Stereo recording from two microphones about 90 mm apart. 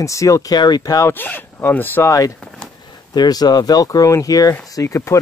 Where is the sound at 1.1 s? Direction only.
20° left (ahead or behind).